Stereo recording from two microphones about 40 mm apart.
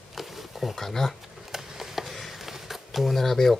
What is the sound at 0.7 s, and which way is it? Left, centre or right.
Speech, centre.